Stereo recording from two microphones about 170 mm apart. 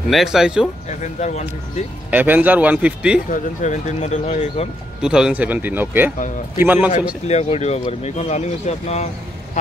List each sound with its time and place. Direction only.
0.1 s speech: centre (ahead or behind)
0.8 s speech: 45° left (ahead or behind)
2.0 s speech: 10° right (ahead or behind)
3.3 s speech: 45° left (ahead or behind)
5.0 s speech: 5° right (ahead or behind)
7.2 s speech: 40° left (ahead or behind)